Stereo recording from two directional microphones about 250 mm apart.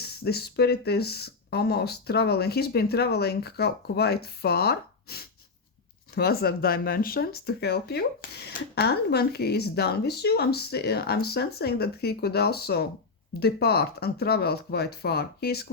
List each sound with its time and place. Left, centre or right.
0.3 s speech: left